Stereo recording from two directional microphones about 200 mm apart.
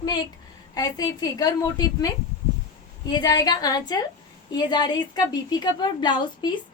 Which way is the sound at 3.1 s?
20° left (ahead or behind).